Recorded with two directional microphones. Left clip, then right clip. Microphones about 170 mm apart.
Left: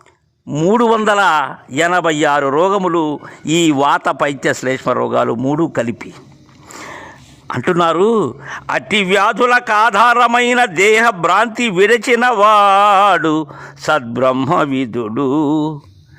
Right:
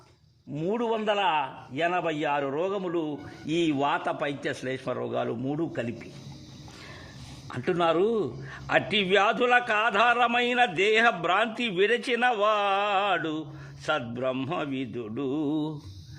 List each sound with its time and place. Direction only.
0.5 s a man's voice: 60° left (ahead or behind)
6.7 s roaring cats: 45° left (ahead or behind)
7.4 s a man's voice: 45° left (ahead or behind)